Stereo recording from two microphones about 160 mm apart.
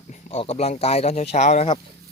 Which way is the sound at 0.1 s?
40° left (ahead or behind).